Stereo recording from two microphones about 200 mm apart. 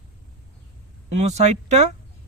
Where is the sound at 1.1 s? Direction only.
35° right (ahead or behind).